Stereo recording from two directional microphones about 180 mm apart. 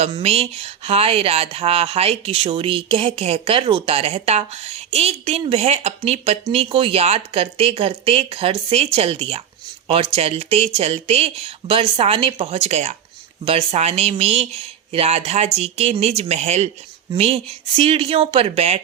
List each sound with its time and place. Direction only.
0.0 s speech: 35° right (ahead or behind)